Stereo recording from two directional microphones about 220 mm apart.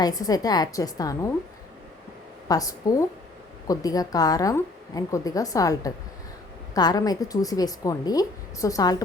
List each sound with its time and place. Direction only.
0.0 s a woman's voice: 15° left (ahead or behind)
2.5 s a woman's voice: 15° left (ahead or behind)